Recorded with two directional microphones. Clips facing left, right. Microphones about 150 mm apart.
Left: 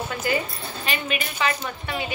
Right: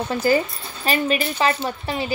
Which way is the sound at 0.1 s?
35° right (ahead or behind).